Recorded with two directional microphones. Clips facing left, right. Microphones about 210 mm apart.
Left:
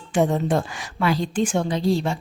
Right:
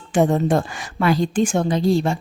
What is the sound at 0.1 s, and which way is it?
A woman's voice, 45° right (ahead or behind).